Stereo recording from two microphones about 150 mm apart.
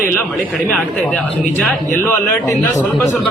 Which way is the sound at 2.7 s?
15° left (ahead or behind).